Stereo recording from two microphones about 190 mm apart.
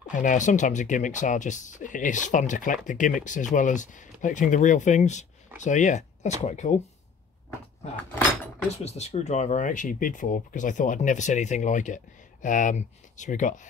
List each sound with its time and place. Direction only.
0.1 s speech: 40° left (ahead or behind)
8.8 s speech: 35° left (ahead or behind)